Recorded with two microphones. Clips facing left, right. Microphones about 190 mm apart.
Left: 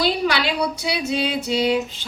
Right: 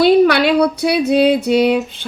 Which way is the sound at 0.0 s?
55° right (ahead or behind).